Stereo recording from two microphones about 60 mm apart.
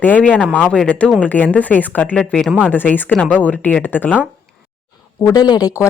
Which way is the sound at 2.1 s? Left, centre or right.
Centre.